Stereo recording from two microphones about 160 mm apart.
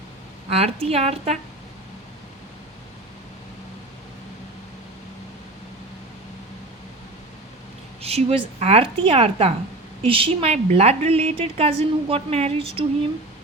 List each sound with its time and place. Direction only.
0.5 s a woman's voice: 40° right (ahead or behind)
8.0 s a woman's voice: 40° right (ahead or behind)